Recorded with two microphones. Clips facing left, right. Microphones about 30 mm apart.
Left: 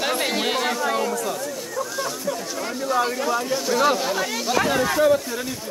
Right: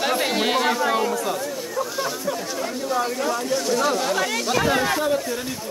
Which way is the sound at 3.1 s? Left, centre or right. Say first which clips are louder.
Even; centre.